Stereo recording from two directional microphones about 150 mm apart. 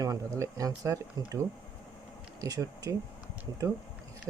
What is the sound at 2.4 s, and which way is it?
Speech, 25° right (ahead or behind).